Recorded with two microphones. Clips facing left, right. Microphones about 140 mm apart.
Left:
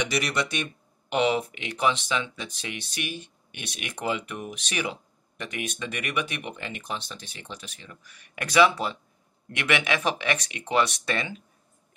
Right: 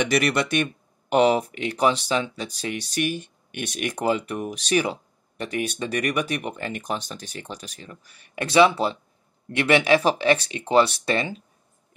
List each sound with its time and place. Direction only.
0.0 s speech: 55° right (ahead or behind)
1.1 s speech: 40° right (ahead or behind)